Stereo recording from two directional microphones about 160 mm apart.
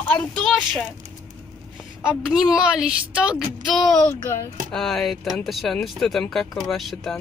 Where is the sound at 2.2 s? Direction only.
5° right (ahead or behind).